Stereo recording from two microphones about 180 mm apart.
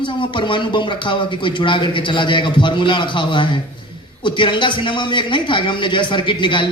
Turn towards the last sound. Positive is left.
turn(degrees=25)  # may be behind; listen again after turning